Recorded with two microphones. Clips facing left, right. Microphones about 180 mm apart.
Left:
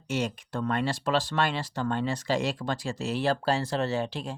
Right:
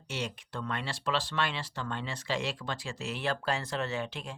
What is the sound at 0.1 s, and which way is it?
Speech, 45° left (ahead or behind).